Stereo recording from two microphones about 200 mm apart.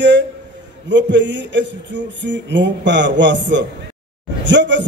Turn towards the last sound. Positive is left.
turn(degrees=-65)  # may be behind; listen again after turning